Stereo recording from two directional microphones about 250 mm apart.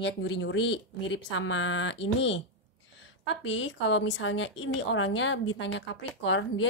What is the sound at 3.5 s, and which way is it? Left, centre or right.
A woman's voice, left.